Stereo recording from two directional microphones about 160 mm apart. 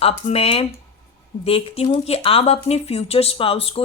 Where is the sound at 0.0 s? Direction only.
40° left (ahead or behind).